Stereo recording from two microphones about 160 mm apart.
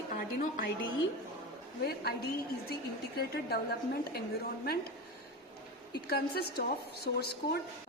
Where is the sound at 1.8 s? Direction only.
75° left (ahead or behind).